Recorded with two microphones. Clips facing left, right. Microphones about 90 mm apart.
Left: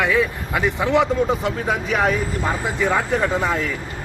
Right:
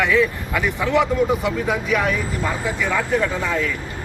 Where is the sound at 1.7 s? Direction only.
40° left (ahead or behind).